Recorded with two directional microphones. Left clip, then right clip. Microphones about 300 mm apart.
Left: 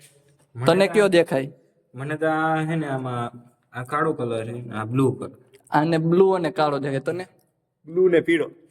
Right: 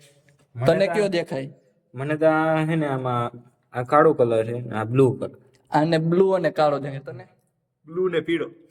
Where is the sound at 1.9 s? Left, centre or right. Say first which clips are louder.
Right 4 dB; centre.